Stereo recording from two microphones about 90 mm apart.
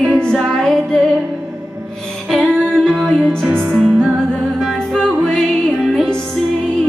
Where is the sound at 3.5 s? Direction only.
20° right (ahead or behind).